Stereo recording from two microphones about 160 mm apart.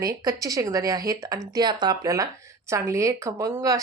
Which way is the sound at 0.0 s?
20° right (ahead or behind).